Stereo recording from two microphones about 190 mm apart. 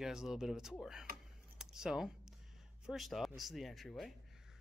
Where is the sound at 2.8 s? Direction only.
Centre (ahead or behind).